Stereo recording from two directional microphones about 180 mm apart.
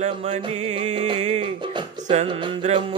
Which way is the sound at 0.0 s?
40° right (ahead or behind).